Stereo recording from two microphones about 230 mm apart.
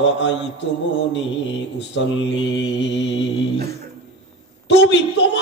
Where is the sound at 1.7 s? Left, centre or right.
Left.